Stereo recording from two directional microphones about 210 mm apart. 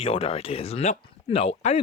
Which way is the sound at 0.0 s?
30° left (ahead or behind).